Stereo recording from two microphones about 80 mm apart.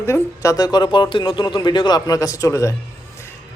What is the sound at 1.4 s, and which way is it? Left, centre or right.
Speech, left.